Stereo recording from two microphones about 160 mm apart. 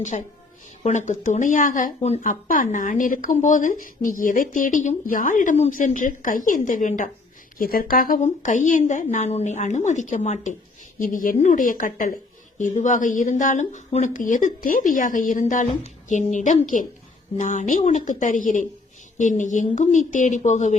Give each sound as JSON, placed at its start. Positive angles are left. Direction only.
{"t": 0.1, "sound": "a woman's voice", "side_deg": 50}
{"t": 2.0, "sound": "speech", "side_deg": 40}
{"t": 2.2, "sound": "a woman's voice", "side_deg": 55}
{"t": 7.6, "sound": "a woman's voice", "side_deg": 65}